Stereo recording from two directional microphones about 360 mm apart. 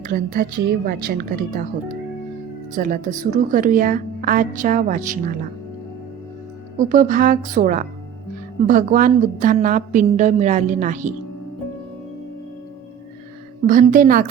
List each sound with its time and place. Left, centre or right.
0.0 s a woman's voice: right
2.7 s a woman's voice: right
6.7 s a woman's voice: right
13.7 s a woman's voice: right